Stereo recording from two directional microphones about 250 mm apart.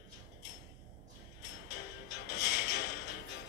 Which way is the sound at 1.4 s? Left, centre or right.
Left.